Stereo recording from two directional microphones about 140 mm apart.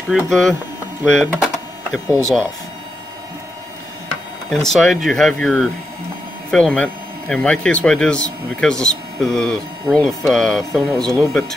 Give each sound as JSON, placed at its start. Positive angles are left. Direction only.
{"t": 0.3, "sound": "speech", "side_deg": 5}
{"t": 4.5, "sound": "speech", "side_deg": 0}